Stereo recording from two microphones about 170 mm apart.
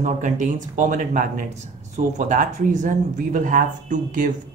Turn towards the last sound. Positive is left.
turn(degrees=-50)  # may be behind; listen again after turning